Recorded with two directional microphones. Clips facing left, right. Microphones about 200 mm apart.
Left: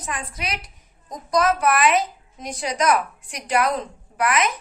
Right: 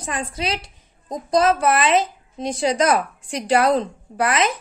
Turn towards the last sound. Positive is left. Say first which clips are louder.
# right 2 dB
turn(degrees=-30)  # may be behind; listen again after turning